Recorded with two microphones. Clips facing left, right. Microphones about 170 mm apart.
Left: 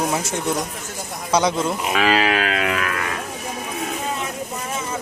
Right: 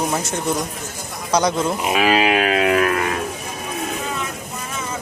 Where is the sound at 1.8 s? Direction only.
15° right (ahead or behind).